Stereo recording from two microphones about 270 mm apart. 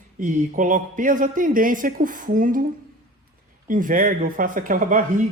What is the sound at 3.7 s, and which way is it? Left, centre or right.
Speech, right.